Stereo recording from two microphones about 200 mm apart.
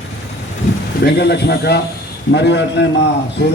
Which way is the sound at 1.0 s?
55° left (ahead or behind).